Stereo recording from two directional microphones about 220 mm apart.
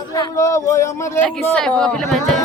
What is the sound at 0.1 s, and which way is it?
Speech, 15° left (ahead or behind).